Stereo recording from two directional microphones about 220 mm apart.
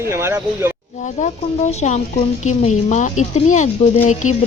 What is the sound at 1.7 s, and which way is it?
Speech, 30° left (ahead or behind).